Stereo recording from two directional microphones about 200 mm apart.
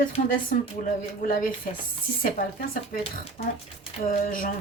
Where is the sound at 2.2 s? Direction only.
45° left (ahead or behind).